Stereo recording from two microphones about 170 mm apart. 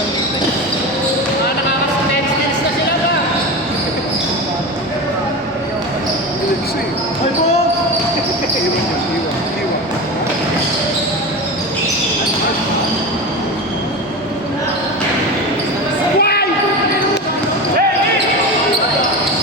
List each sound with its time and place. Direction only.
16.2 s basketball bounce: 70° left (ahead or behind)